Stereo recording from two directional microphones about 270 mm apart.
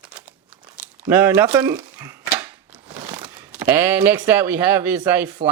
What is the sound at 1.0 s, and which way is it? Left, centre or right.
Speech, centre.